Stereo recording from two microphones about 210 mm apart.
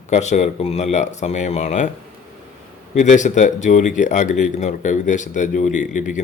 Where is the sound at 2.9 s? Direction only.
35° left (ahead or behind).